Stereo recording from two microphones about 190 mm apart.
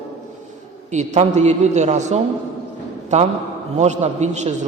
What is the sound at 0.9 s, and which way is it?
Mantra, 40° right (ahead or behind).